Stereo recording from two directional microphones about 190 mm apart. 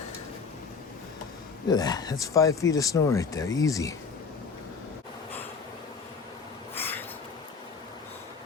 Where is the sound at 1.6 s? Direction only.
20° left (ahead or behind).